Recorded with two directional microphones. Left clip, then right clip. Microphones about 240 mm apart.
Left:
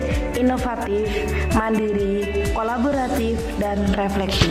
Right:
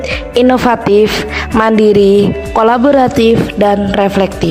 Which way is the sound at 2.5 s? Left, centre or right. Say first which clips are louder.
Right 17 dB; right.